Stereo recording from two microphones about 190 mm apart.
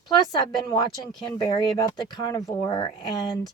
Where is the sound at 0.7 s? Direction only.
20° left (ahead or behind).